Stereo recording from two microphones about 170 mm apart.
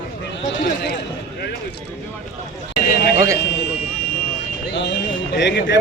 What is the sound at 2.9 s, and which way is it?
Speech, 75° left (ahead or behind).